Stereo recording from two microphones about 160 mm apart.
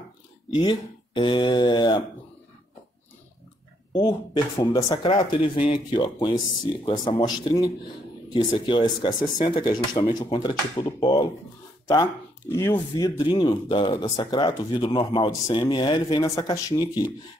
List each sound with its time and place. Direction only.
0.6 s speech: 30° left (ahead or behind)
3.9 s speech: 25° left (ahead or behind)
12.5 s speech: 15° left (ahead or behind)